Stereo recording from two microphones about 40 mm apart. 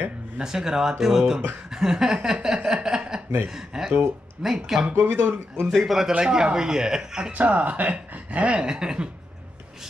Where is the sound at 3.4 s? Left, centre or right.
Centre.